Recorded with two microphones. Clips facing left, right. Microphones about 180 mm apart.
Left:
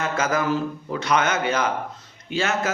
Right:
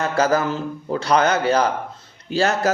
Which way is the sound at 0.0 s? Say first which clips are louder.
Right 4 dB; 35° right (ahead or behind).